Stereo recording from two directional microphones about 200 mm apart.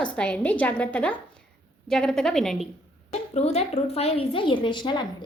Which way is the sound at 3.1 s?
35° left (ahead or behind).